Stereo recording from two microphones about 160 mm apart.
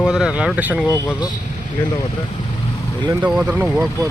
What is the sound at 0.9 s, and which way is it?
Speech, 20° left (ahead or behind).